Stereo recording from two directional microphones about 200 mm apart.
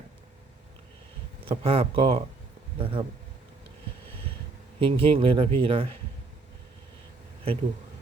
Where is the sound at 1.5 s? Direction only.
30° right (ahead or behind).